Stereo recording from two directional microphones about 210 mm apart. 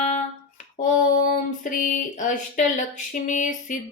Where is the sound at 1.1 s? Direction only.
40° left (ahead or behind).